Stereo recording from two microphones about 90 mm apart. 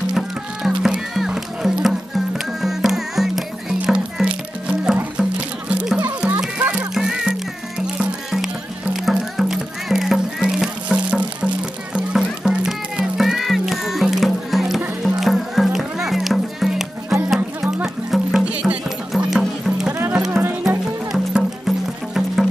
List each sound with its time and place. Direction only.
0.1 s music: 5° right (ahead or behind)
6.0 s music: 15° right (ahead or behind)